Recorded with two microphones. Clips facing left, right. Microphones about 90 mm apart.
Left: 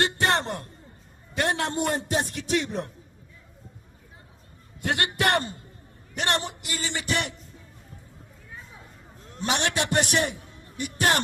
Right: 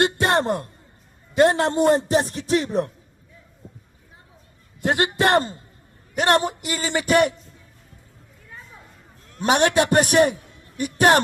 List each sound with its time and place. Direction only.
0.0 s a man's voice: 20° right (ahead or behind)
4.8 s a man's voice: 20° right (ahead or behind)
6.1 s a man's voice: 45° right (ahead or behind)
9.4 s a man's voice: 50° right (ahead or behind)